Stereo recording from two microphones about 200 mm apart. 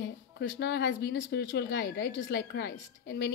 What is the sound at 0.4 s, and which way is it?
Speech, 55° left (ahead or behind).